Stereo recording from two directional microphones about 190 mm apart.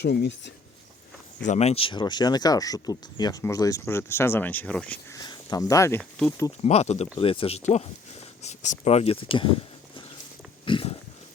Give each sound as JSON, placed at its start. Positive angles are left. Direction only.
{"t": 0.0, "sound": "speech", "side_deg": 60}
{"t": 1.5, "sound": "speech", "side_deg": 35}
{"t": 5.2, "sound": "speech", "side_deg": 20}
{"t": 6.0, "sound": "speech", "side_deg": 0}
{"t": 6.6, "sound": "speech", "side_deg": 35}
{"t": 10.7, "sound": "pig", "side_deg": 25}